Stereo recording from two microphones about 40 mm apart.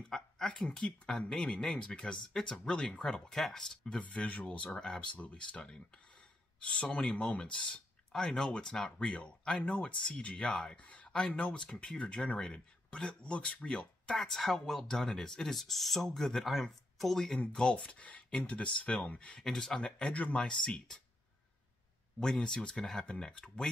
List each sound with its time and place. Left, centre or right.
0.1 s a sound: centre
0.7 s speech: centre
4.3 s speech: left
4.7 s speech: centre
5.3 s speech: left
8.1 s speech: centre; by 10.3 s left
10.3 s speech: centre
10.8 s speech: left
14.1 s speech: centre
17.5 s speech: left
19.4 s speech: centre
20.1 s speech: left
20.3 s speech: centre
22.2 s speech: centre